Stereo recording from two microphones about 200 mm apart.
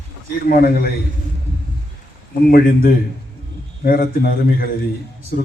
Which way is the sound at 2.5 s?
50° left (ahead or behind).